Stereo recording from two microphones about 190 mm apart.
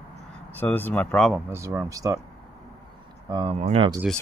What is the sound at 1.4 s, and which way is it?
Speech, 15° right (ahead or behind).